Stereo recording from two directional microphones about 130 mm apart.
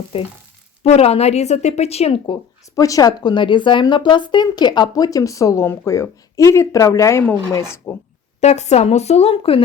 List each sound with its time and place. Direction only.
0.1 s speech: 45° left (ahead or behind)
2.8 s speech: 25° left (ahead or behind)
8.4 s speech: 60° left (ahead or behind)